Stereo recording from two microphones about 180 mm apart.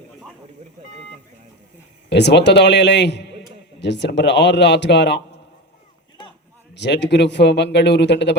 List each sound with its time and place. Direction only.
2.0 s speech: 70° left (ahead or behind)
6.7 s speech: 75° left (ahead or behind)